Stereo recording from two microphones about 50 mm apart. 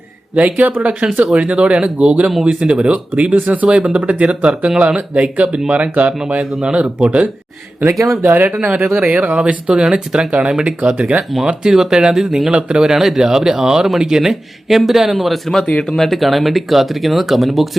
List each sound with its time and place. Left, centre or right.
0.3 s speech: right
3.8 s speech: centre
7.9 s speech: right
8.2 s speech: right
11.4 s speech: centre